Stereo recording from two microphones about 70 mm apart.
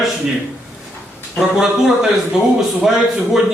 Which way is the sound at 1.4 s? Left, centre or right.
Centre.